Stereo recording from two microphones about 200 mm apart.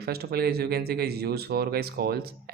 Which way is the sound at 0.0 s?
50° right (ahead or behind).